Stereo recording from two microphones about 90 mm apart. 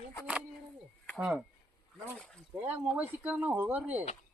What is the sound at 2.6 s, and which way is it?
Speech, 20° right (ahead or behind).